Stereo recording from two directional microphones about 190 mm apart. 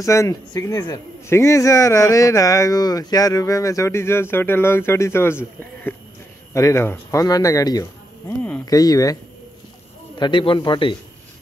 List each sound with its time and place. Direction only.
0.0 s a man's voice: 15° left (ahead or behind)